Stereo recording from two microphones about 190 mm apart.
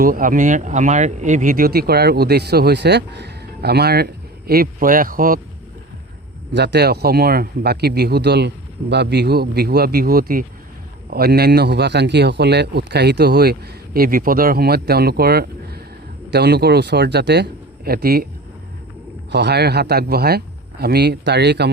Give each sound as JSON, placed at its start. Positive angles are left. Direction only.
{"t": 0.0, "sound": "speech", "side_deg": -45}
{"t": 6.5, "sound": "speech", "side_deg": -65}
{"t": 19.3, "sound": "speech", "side_deg": -60}